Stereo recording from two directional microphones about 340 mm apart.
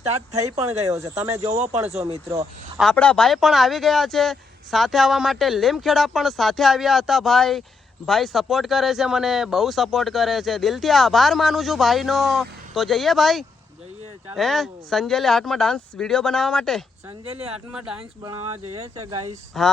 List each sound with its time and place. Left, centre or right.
0.3 s speech: centre
2.7 s speech: centre
17.1 s speech: centre
17.5 s speech: centre
18.7 s speech: centre
19.6 s speech: centre